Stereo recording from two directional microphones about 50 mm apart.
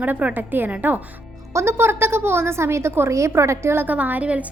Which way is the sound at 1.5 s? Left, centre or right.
Right.